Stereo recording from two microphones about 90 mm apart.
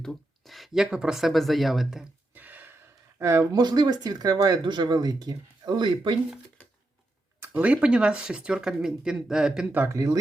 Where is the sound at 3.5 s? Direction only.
50° right (ahead or behind).